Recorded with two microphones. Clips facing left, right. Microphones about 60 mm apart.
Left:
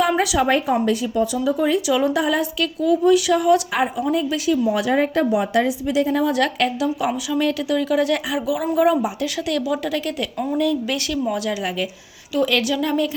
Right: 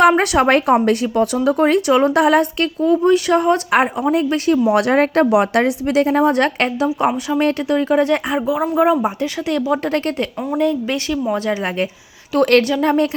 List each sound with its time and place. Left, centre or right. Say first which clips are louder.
0.2 s speech: right 4 dB; right
2.8 s speech: right 2 dB; right
3.7 s speech: right 5 dB; right
6.1 s a woman's voice: right 4 dB; right
9.0 s speech: right 3 dB; right
9.5 s speech: right 4 dB; right
9.8 s a woman's voice: right 4 dB; right
10.6 s speech: right 4 dB; right
11.4 s speech: right 4 dB; right
12.4 s speech: right 7 dB; right
12.6 s speech: right 5 dB; right